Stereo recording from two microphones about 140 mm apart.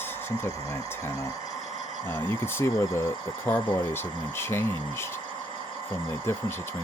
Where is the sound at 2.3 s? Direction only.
15° left (ahead or behind).